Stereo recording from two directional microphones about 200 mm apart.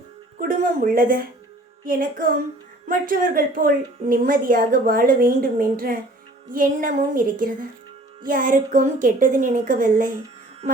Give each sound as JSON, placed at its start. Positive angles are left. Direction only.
{"t": 0.3, "sound": "a woman's voice", "side_deg": -45}